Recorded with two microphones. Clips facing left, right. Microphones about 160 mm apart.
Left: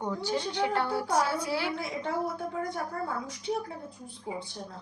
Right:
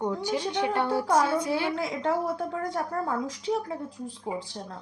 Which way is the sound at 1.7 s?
90° right.